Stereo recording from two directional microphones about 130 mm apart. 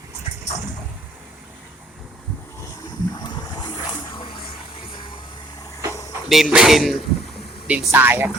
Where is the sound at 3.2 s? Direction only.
30° left (ahead or behind).